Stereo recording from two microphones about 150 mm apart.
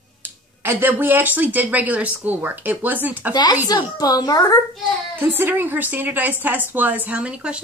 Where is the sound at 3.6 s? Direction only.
25° left (ahead or behind).